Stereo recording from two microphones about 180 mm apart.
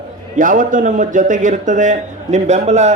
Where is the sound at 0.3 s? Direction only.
45° right (ahead or behind).